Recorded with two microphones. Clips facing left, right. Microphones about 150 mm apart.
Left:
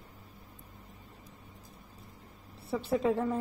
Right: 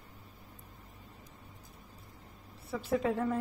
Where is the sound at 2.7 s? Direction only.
30° left (ahead or behind).